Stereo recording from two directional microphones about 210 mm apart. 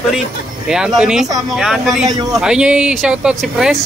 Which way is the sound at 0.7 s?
Centre (ahead or behind).